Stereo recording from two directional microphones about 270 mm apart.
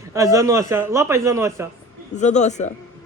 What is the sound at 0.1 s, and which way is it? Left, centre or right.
A man's voice, centre.